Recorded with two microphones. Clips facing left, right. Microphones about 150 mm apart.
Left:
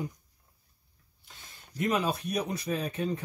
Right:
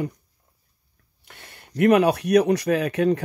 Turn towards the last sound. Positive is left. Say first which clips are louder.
# right 11 dB
turn(degrees=-80)